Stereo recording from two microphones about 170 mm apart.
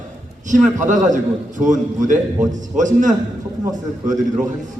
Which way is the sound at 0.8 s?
45° right (ahead or behind).